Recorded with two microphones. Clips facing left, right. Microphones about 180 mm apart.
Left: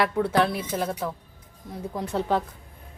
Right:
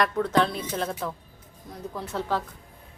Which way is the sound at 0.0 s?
10° left (ahead or behind).